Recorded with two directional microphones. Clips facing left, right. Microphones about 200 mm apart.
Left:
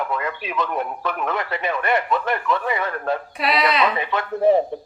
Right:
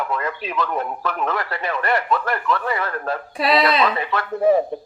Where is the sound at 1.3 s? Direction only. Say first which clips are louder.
Left 1 dB; 20° left (ahead or behind).